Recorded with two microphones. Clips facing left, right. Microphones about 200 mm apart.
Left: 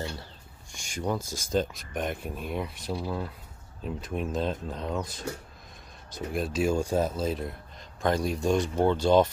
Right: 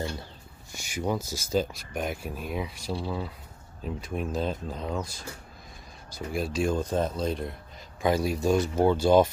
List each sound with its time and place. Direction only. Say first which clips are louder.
0.7 s speech: right 1 dB; 5° right (ahead or behind)